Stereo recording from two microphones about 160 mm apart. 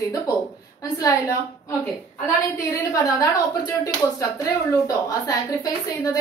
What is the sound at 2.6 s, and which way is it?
A woman's voice, 20° left (ahead or behind).